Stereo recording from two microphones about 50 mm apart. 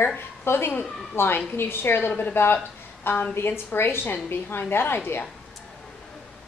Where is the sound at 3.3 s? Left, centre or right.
Left.